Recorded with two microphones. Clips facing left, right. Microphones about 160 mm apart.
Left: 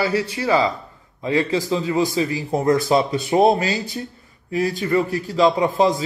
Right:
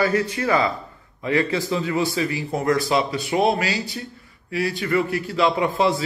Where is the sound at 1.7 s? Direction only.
30° left (ahead or behind).